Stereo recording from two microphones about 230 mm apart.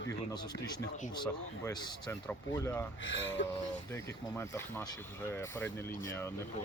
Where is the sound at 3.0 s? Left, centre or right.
Left.